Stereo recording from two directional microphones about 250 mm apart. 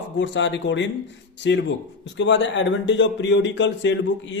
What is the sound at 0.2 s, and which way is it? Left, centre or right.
Speech, left.